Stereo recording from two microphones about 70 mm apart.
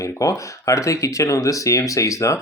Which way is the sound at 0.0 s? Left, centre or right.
Left.